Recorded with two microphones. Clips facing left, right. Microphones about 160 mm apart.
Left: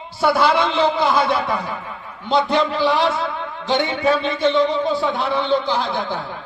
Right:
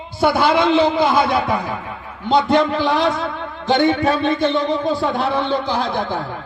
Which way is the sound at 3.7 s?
45° right (ahead or behind).